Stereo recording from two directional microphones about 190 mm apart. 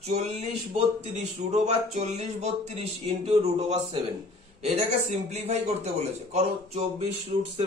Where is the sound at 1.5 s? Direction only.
35° right (ahead or behind).